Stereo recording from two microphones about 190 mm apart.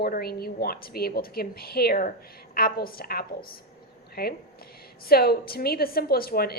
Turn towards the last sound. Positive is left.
turn(degrees=55)  # may be behind; listen again after turning